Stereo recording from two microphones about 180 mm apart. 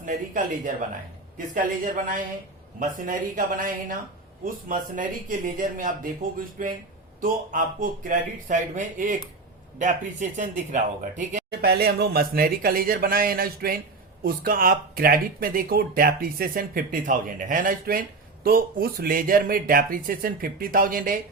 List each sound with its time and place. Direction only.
0.0 s speech: 45° right (ahead or behind)
11.6 s a man's voice: 60° right (ahead or behind)